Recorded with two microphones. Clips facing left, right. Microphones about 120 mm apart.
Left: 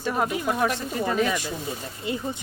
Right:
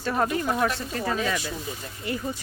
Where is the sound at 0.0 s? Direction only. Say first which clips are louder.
Even; 10° left (ahead or behind).